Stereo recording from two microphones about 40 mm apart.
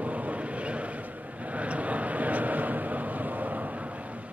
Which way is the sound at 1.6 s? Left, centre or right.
Right.